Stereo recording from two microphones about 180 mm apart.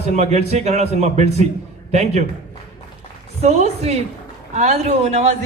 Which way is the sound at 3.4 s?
35° right (ahead or behind).